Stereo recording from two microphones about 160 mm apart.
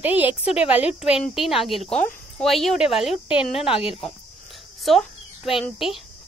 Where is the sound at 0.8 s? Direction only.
40° left (ahead or behind).